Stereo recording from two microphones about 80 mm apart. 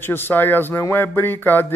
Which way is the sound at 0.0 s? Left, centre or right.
Left.